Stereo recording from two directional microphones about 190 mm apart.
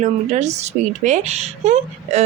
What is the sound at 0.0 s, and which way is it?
Speech, 35° right (ahead or behind).